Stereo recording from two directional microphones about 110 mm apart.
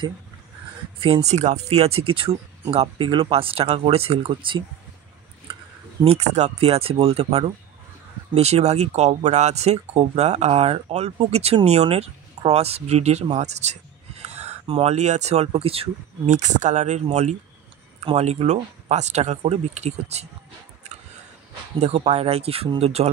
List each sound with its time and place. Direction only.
0.9 s speech: 55° right (ahead or behind)
1.2 s speech: 90° right; by 3.1 s 65° right (ahead or behind)
3.1 s speech: 50° right (ahead or behind)
6.0 s speech: 90° right
14.2 s speech: 80° right
18.0 s speech: 70° right (ahead or behind); by 20.2 s 85° right
21.8 s speech: 70° right (ahead or behind)